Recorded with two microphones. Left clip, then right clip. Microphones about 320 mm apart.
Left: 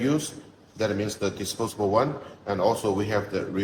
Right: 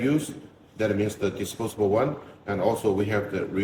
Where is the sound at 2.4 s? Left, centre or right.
Centre.